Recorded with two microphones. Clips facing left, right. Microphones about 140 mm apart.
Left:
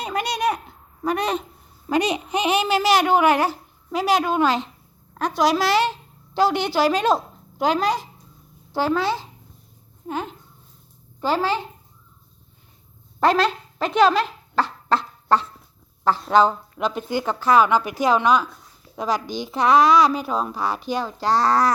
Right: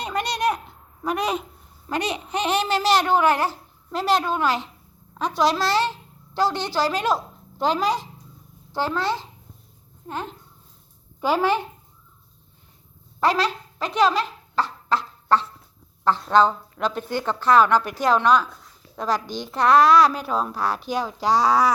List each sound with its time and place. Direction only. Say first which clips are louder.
0.0 s a sound: left 1 dB; 5° left (ahead or behind)
1.0 s a woman's voice: left 2 dB; centre (ahead or behind)
1.9 s a woman's voice: left 5 dB; 15° left (ahead or behind)
7.6 s a woman's voice: left 1 dB; 5° left (ahead or behind)
11.2 s speech: right 1 dB; 15° right (ahead or behind)
13.3 s speech: left 3 dB; 55° left (ahead or behind)
16.3 s a woman's voice: left 1 dB; 5° left (ahead or behind)